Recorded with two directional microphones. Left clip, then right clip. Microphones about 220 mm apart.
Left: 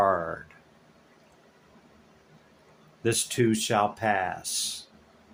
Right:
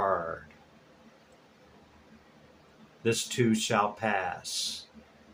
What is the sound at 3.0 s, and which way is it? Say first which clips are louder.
Speech: left 2 dB; 35° left (ahead or behind).